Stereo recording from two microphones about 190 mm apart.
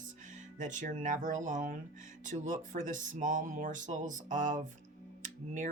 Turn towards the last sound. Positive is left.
turn(degrees=-40)  # may be behind; listen again after turning